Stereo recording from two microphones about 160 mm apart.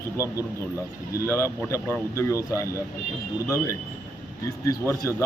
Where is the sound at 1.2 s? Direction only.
15° left (ahead or behind).